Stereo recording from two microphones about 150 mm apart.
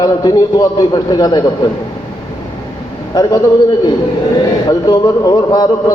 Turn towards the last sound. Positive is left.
turn(degrees=25)  # may be behind; listen again after turning